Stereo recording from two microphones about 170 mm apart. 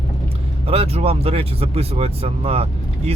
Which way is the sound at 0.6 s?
35° right (ahead or behind).